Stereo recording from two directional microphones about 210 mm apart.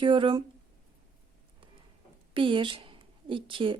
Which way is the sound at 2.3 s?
25° right (ahead or behind).